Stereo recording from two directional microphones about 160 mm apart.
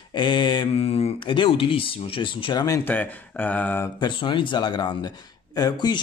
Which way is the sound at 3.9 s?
30° left (ahead or behind).